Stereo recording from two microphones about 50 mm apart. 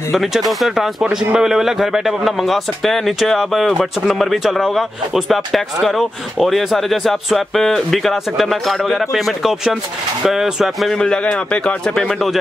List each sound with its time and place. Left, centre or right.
0.1 s speech: centre
11.0 s speech: centre